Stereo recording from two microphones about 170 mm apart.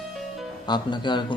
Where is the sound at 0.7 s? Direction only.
25° left (ahead or behind).